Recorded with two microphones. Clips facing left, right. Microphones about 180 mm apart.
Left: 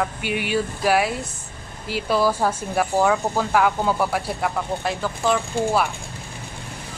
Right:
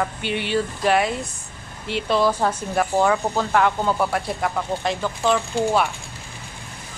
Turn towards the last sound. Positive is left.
turn(degrees=5)  # may be behind; listen again after turning